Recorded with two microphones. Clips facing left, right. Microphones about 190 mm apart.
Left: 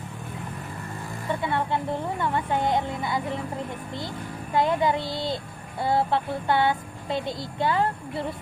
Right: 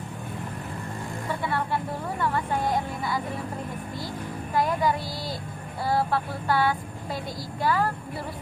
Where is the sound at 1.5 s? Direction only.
20° left (ahead or behind).